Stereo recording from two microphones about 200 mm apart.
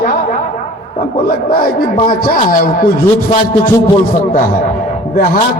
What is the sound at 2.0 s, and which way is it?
Speech, 45° left (ahead or behind).